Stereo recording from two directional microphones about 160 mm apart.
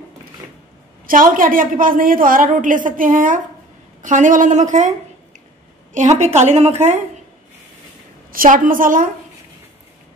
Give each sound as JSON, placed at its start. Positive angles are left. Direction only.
{"t": 1.0, "sound": "a woman's voice", "side_deg": -60}
{"t": 5.9, "sound": "a woman's voice", "side_deg": -45}
{"t": 8.3, "sound": "a woman's voice", "side_deg": -60}